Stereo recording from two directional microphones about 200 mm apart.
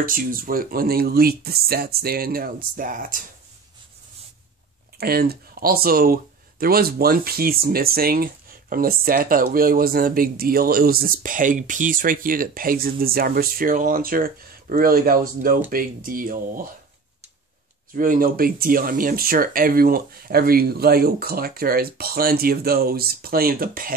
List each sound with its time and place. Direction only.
0.0 s speech: 45° right (ahead or behind)
4.9 s speech: 50° right (ahead or behind)
17.9 s speech: 45° right (ahead or behind)